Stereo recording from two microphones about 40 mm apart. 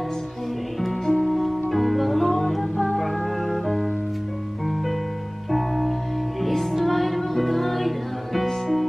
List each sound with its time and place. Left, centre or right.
0.7 s music: centre
5.5 s music: centre